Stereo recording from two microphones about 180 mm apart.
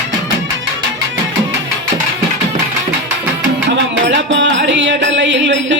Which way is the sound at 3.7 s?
85° right.